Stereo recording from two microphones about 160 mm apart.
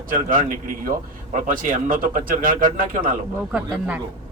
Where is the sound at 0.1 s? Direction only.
60° right (ahead or behind).